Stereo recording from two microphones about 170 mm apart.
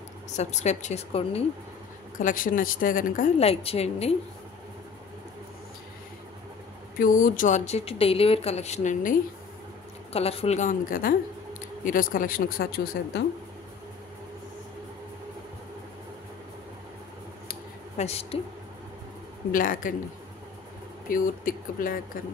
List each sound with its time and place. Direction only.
0.4 s speech: 40° left (ahead or behind)
2.1 s speech: 50° left (ahead or behind)
3.3 s speech: 35° left (ahead or behind)
7.0 s speech: 55° left (ahead or behind)
10.1 s speech: 35° left (ahead or behind); by 13.2 s 60° left (ahead or behind)
17.9 s a woman's voice: 40° left (ahead or behind)
19.5 s speech: 55° left (ahead or behind)
21.1 s speech: 55° left (ahead or behind)